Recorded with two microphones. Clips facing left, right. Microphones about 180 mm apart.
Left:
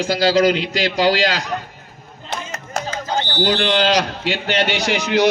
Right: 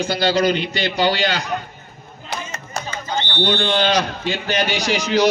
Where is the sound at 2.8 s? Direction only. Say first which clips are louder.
Left 2 dB; 40° left (ahead or behind).